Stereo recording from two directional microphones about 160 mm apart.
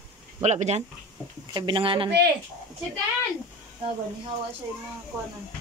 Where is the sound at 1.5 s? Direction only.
25° right (ahead or behind).